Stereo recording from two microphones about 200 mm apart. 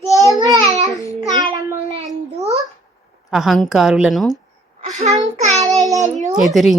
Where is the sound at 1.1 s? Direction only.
20° right (ahead or behind).